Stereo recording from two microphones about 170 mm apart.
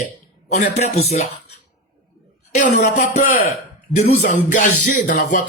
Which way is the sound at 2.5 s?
45° left (ahead or behind).